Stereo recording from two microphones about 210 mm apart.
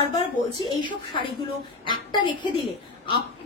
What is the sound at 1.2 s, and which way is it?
A woman's voice, 25° left (ahead or behind).